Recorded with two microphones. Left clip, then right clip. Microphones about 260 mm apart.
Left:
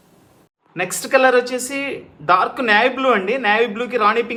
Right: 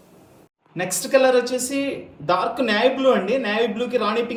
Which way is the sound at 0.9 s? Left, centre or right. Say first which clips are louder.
Left 2 dB; centre.